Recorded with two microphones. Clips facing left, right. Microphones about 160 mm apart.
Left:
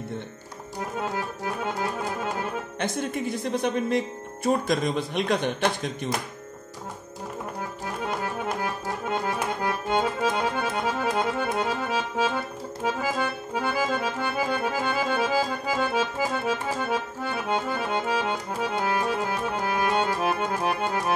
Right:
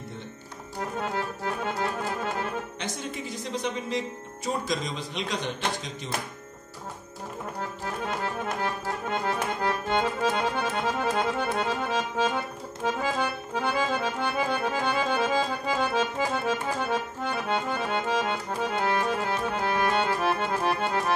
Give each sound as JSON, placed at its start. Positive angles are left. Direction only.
{"t": 0.9, "sound": "accordion", "side_deg": 10}
{"t": 2.8, "sound": "a man's voice", "side_deg": 55}
{"t": 9.1, "sound": "accordion", "side_deg": 10}
{"t": 19.5, "sound": "music", "side_deg": 15}